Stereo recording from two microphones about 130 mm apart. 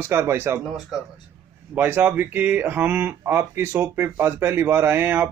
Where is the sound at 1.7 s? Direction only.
15° right (ahead or behind).